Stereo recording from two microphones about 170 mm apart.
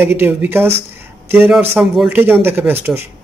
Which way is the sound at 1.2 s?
10° right (ahead or behind).